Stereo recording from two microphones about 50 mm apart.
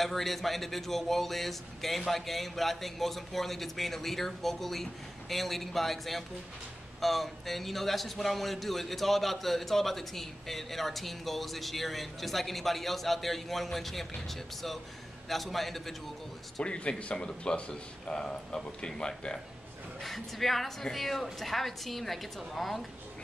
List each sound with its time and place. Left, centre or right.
0.0 s a man's voice: centre
16.6 s speech: left
20.0 s a man's voice: centre